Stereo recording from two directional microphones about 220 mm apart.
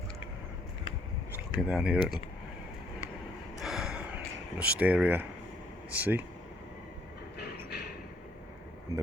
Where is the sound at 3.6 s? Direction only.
Centre (ahead or behind).